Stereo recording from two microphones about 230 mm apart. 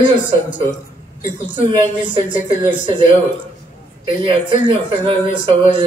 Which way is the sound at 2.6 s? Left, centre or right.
Left.